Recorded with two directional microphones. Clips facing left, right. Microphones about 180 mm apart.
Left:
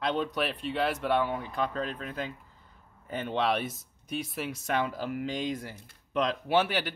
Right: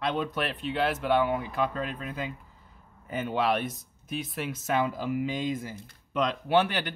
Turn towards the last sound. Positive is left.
turn(degrees=5)  # may be behind; listen again after turning